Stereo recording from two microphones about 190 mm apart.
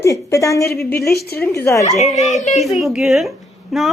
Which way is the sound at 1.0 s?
55° left (ahead or behind).